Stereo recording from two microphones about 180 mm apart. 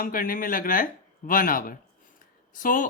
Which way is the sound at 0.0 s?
50° left (ahead or behind).